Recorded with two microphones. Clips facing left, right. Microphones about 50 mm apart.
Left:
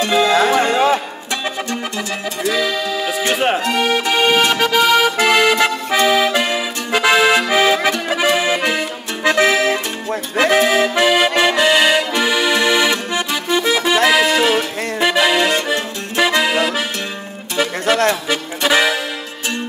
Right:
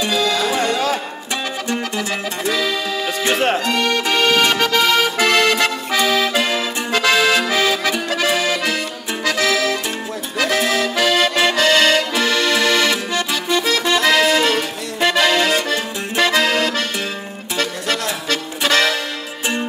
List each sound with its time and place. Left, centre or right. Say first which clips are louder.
0.1 s music: left 8 dB; left
2.5 s accordion: left 2 dB; centre
18.3 s music: left 2 dB; centre